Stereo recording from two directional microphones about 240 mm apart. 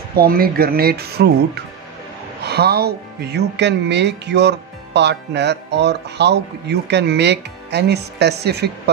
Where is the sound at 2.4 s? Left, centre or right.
Right.